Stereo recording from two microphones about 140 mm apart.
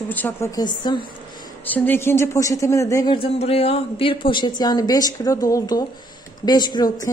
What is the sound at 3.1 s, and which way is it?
A woman's voice, 45° left (ahead or behind).